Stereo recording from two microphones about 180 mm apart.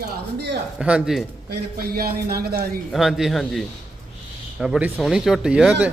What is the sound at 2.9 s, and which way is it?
Speech, centre (ahead or behind).